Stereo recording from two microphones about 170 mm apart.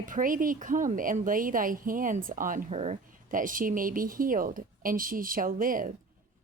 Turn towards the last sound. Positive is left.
turn(degrees=-55)  # may be behind; listen again after turning